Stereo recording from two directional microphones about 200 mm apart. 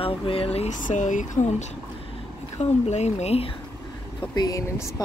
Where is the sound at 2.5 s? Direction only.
35° left (ahead or behind).